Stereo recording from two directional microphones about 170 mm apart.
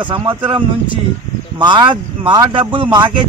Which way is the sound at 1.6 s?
25° right (ahead or behind).